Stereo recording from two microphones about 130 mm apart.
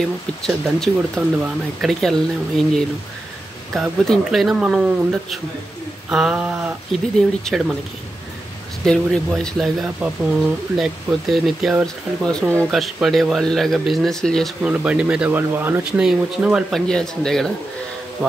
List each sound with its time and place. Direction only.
0.4 s speech: 5° left (ahead or behind)
3.7 s speech: centre (ahead or behind)
8.8 s speech: 5° left (ahead or behind)
14.6 s speech: 10° right (ahead or behind)
16.7 s speech: 5° left (ahead or behind)